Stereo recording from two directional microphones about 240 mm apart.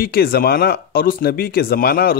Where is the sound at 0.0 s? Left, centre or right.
Left.